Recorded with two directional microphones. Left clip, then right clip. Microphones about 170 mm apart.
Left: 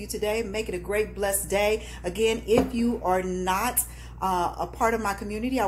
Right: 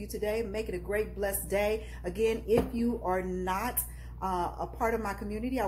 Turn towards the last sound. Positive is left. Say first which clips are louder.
# left 6 dB
turn(degrees=0)  # may be behind; listen again after turning